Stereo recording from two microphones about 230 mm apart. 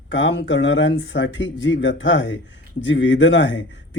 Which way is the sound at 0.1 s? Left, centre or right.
Left.